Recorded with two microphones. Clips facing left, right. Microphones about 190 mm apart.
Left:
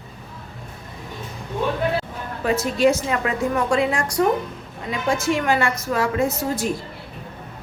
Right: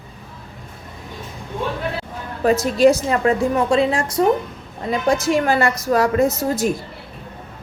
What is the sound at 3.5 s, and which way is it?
Speech, 25° right (ahead or behind).